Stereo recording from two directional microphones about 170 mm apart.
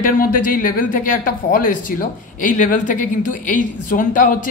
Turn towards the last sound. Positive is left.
turn(degrees=50)  # may be behind; listen again after turning